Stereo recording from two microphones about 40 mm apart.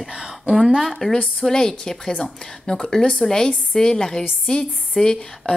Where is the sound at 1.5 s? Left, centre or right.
Centre.